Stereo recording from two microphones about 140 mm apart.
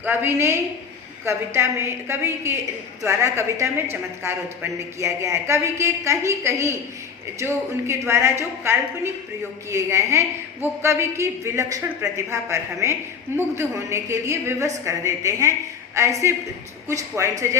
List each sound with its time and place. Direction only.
0.0 s a man's voice: 15° right (ahead or behind)